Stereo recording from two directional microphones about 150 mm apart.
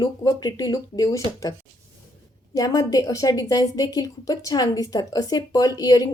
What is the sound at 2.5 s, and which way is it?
Speech, 25° left (ahead or behind).